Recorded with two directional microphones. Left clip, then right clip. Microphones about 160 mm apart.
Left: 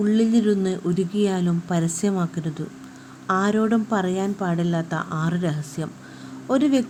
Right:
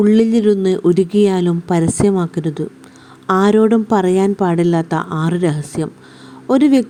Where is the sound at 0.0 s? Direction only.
40° right (ahead or behind).